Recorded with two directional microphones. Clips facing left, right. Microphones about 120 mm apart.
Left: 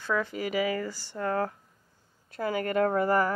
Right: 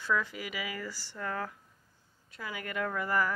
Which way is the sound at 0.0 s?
30° left (ahead or behind).